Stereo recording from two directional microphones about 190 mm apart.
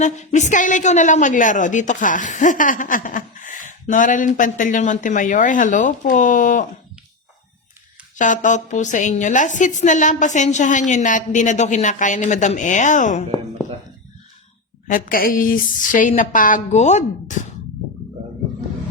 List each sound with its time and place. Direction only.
0.0 s a woman's voice: 40° left (ahead or behind)
8.1 s a woman's voice: 40° left (ahead or behind)
14.8 s a woman's voice: 45° left (ahead or behind)